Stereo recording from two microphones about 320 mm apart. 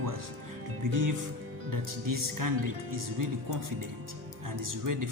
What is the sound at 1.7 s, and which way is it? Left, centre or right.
Speech, right.